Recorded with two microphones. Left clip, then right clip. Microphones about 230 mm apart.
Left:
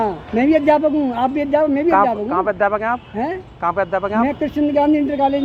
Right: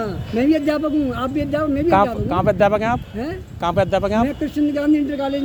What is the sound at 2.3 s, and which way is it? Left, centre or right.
A man's voice, right.